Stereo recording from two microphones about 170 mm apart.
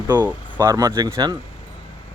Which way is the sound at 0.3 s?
10° right (ahead or behind).